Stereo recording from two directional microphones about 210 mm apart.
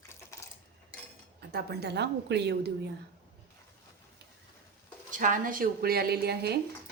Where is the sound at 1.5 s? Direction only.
50° right (ahead or behind).